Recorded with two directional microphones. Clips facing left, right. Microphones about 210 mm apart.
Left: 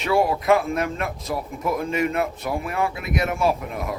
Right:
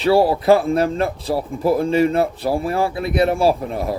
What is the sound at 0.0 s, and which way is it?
Speech, 35° right (ahead or behind).